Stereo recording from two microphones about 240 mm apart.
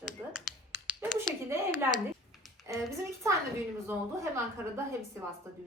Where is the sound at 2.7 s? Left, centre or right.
Centre.